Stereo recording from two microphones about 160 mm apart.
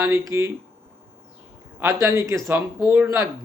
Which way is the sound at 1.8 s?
15° right (ahead or behind).